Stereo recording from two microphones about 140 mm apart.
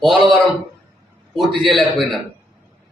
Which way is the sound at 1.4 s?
Centre (ahead or behind).